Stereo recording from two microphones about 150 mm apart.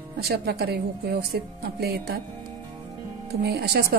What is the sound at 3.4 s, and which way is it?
Speech, 90° right.